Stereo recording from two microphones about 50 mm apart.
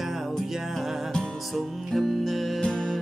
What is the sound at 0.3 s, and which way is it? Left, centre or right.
Music, centre.